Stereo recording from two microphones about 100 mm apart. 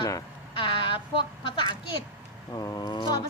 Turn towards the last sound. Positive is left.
turn(degrees=45)  # may be behind; listen again after turning